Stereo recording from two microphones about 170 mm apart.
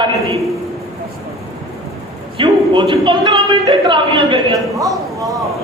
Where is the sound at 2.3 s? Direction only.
30° right (ahead or behind).